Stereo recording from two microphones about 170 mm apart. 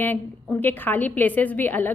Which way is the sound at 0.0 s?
10° left (ahead or behind).